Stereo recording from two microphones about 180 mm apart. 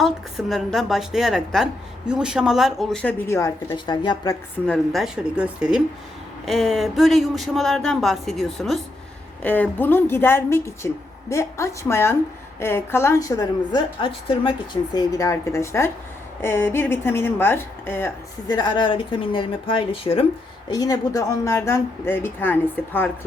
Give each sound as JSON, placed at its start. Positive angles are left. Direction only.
{"t": 0.0, "sound": "a woman's voice", "side_deg": 0}
{"t": 4.6, "sound": "a woman's voice", "side_deg": 5}
{"t": 18.4, "sound": "a woman's voice", "side_deg": 25}